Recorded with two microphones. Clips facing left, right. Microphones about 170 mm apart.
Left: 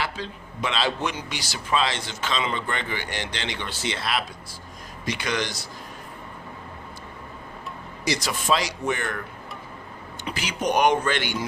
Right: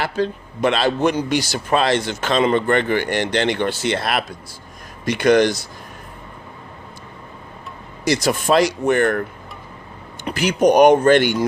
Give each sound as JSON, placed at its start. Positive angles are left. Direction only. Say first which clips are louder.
{"t": 0.0, "sound": "a man's voice", "louder": "right 9 dB", "side_deg": -55}
{"t": 8.0, "sound": "speech", "louder": "right 8 dB", "side_deg": -50}
{"t": 10.2, "sound": "speech", "louder": "right 11 dB", "side_deg": -50}